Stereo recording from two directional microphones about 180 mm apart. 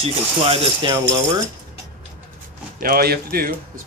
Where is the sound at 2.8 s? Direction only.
55° right (ahead or behind).